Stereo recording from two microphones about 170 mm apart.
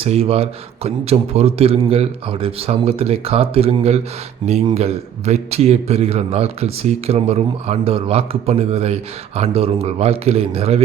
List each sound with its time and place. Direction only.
0.0 s a man's voice: 35° right (ahead or behind)